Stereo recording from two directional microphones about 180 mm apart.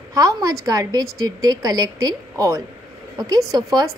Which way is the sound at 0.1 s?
20° right (ahead or behind).